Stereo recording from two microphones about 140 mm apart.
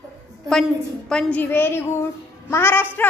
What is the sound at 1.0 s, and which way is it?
A woman's voice, 5° left (ahead or behind).